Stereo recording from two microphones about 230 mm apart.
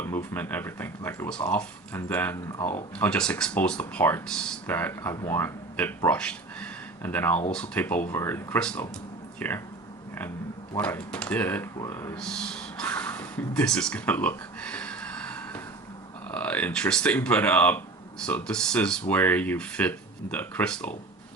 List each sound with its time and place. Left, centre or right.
0.0 s speech: centre
10.8 s speech: centre